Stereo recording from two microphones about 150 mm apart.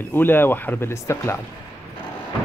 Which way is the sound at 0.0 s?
15° left (ahead or behind).